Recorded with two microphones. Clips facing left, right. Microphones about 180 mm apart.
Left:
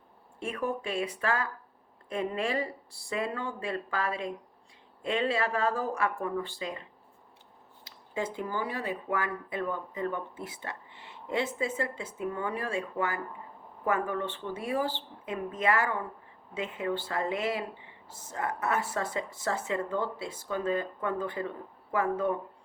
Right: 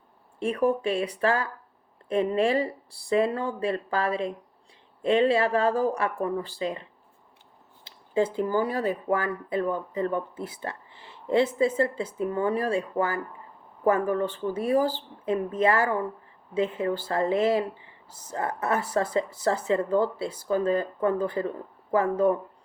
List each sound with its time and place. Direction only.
0.3 s speech: 35° right (ahead or behind)
7.9 s speech: 30° right (ahead or behind)